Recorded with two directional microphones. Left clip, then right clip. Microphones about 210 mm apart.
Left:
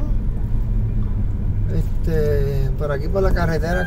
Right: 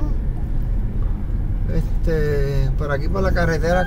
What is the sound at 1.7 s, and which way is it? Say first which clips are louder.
Speech: right 1 dB; 30° right (ahead or behind).